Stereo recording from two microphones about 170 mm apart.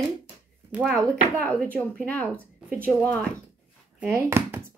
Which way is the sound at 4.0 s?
15° right (ahead or behind).